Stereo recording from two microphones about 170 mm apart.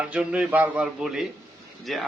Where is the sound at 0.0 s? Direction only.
5° right (ahead or behind).